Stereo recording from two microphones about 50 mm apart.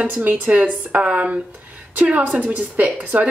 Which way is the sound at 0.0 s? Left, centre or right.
Right.